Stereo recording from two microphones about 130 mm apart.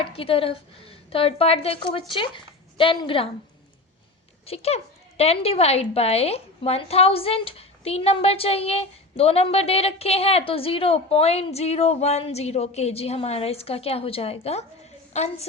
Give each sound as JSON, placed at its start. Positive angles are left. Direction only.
{"t": 0.0, "sound": "a woman's voice", "side_deg": 45}
{"t": 4.4, "sound": "a woman's voice", "side_deg": 50}